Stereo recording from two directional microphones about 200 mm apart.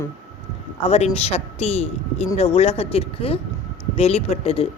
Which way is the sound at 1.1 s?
30° left (ahead or behind).